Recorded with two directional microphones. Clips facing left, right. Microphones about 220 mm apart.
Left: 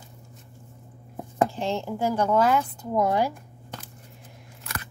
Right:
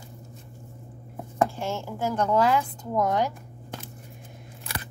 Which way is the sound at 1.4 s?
20° left (ahead or behind).